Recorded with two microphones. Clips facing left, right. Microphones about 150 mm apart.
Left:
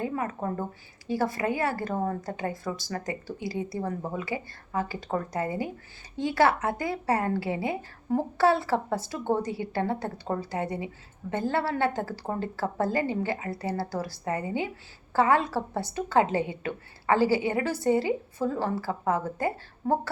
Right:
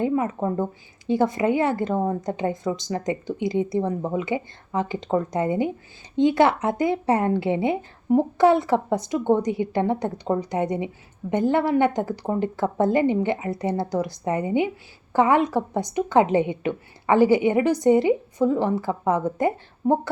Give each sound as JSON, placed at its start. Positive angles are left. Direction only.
{"t": 0.0, "sound": "speech", "side_deg": -20}